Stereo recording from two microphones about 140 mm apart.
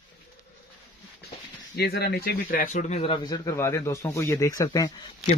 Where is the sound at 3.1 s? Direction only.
30° left (ahead or behind).